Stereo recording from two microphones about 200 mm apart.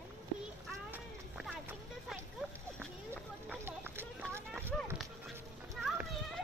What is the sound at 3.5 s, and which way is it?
Run, 10° right (ahead or behind).